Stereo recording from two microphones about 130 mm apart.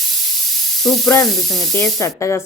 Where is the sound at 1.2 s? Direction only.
Centre (ahead or behind).